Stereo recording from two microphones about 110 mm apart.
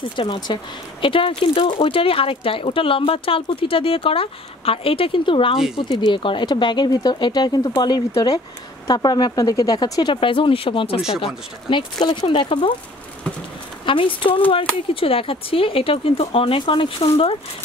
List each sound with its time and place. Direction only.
0.2 s speech: 50° left (ahead or behind)
5.8 s speech: 40° left (ahead or behind)
10.2 s speech: 50° left (ahead or behind)
13.8 s speech: 50° left (ahead or behind)